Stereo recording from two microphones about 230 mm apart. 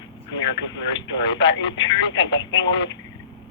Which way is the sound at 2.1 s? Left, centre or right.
Left.